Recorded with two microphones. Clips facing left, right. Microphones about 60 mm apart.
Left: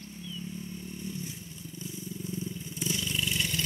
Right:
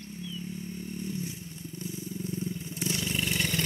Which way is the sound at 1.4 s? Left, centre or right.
Right.